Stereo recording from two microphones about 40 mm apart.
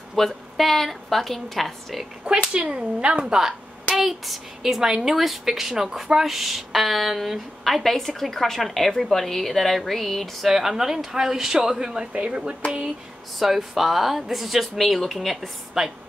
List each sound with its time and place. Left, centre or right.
0.1 s speech: centre
2.5 s speech: right
3.9 s speech: centre
10.5 s speech: centre
12.1 s speech: right
13.4 s speech: centre
15.8 s speech: centre